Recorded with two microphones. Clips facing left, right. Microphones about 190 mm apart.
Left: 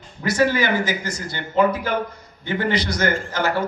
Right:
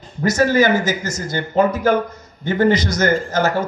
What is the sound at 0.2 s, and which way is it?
A man's voice, 45° right (ahead or behind).